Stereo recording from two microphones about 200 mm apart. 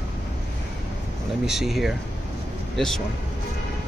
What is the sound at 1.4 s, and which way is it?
Speech, centre (ahead or behind).